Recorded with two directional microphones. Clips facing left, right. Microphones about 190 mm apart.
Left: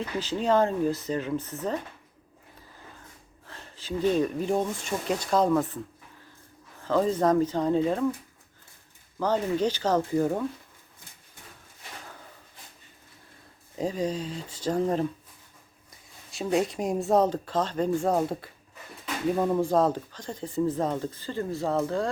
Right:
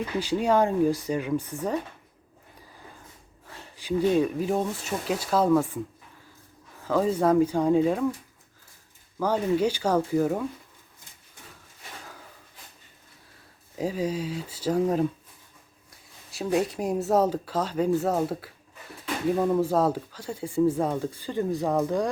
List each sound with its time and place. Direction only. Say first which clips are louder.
0.2 s speech: right 1 dB; 10° right (ahead or behind)
3.4 s speech: right 3 dB; 10° right (ahead or behind)
6.8 s speech: right 1 dB; 10° right (ahead or behind)
9.1 s speech: right 2 dB; 10° right (ahead or behind)
13.7 s speech: right 1 dB; 10° right (ahead or behind)
16.3 s speech: even; 5° right (ahead or behind)